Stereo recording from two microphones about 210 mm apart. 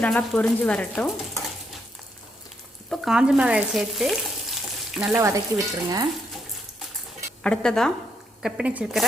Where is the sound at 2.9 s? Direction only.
5° right (ahead or behind).